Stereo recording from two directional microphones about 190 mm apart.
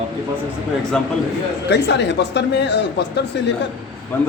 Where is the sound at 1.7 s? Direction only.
65° left (ahead or behind).